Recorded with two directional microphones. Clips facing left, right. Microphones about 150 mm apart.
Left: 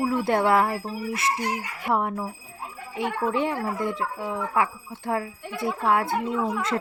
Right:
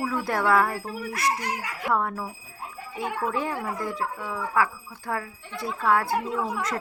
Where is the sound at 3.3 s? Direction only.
25° left (ahead or behind).